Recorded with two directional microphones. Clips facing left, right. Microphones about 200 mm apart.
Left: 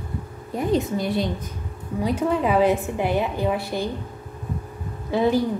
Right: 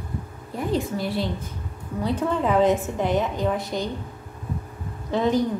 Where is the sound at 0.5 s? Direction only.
20° left (ahead or behind).